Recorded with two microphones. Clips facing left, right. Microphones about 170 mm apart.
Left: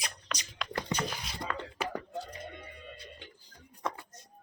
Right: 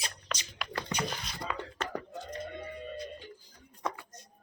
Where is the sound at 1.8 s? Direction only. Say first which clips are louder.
Left 4 dB; 10° left (ahead or behind).